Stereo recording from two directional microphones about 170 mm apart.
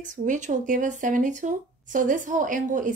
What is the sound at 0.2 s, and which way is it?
Speech, 45° right (ahead or behind).